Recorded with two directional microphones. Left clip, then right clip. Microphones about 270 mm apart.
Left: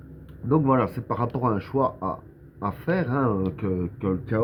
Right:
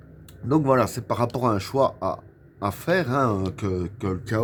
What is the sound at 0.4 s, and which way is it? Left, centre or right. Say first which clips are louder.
Speech: right 2 dB; right.